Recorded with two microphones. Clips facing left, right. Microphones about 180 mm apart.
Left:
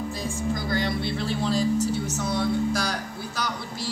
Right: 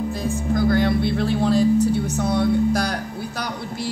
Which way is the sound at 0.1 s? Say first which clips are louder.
Right 5 dB; 60° right (ahead or behind).